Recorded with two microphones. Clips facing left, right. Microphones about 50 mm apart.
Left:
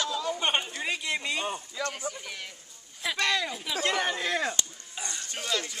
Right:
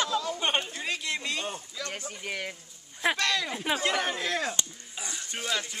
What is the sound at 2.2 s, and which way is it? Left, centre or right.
Speech, right.